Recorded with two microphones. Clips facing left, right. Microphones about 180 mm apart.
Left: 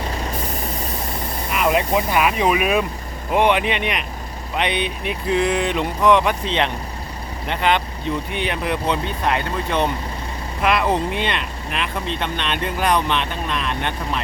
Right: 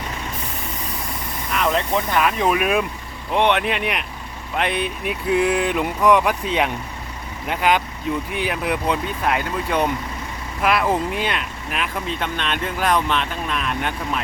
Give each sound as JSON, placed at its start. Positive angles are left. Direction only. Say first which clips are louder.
{"t": 0.1, "sound": "vehicle", "louder": "left 4 dB", "side_deg": 35}
{"t": 1.5, "sound": "speech", "louder": "left 2 dB", "side_deg": 5}